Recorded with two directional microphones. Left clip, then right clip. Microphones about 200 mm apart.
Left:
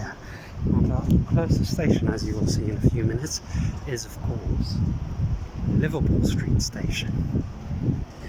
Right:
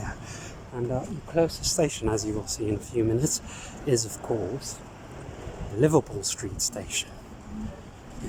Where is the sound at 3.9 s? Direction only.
25° right (ahead or behind).